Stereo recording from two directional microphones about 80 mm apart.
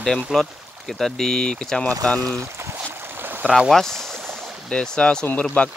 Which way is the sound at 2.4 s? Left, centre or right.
Right.